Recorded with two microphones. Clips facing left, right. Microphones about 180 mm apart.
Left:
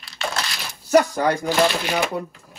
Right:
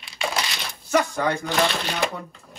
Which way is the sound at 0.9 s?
35° left (ahead or behind).